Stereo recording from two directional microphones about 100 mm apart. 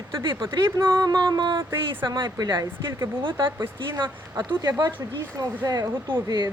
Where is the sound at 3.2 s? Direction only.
55° right (ahead or behind).